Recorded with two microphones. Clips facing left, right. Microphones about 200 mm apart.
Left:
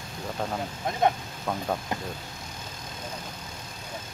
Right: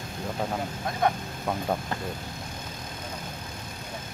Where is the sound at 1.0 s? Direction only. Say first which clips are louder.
Left 2 dB; 20° left (ahead or behind).